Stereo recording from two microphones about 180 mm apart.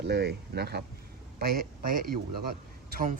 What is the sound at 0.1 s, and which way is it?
Speech, 65° right (ahead or behind).